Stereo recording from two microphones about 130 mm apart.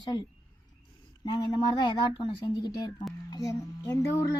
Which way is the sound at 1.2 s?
35° left (ahead or behind).